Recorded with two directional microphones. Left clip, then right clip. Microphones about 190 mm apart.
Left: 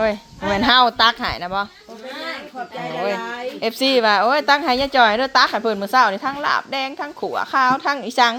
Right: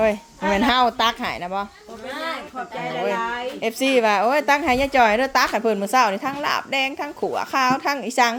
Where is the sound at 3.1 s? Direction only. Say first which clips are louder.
Right 2 dB; 35° left (ahead or behind).